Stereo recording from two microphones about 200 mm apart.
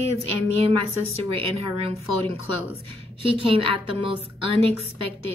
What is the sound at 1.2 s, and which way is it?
A woman's voice, 30° right (ahead or behind).